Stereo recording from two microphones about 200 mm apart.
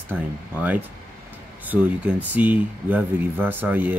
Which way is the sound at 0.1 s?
10° right (ahead or behind).